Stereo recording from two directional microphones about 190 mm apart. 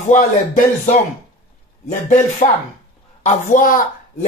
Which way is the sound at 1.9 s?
40° left (ahead or behind).